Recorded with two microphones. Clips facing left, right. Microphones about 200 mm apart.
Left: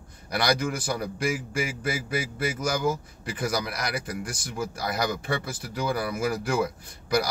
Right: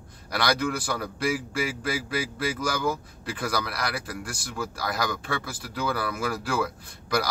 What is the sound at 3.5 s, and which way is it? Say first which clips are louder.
Speech: right 1 dB; 20° left (ahead or behind).